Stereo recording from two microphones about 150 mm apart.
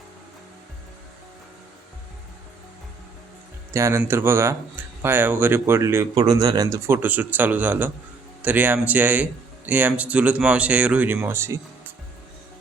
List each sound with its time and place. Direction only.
3.7 s speech: 20° right (ahead or behind)